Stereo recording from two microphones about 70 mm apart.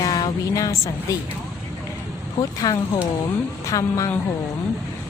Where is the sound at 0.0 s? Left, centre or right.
Left.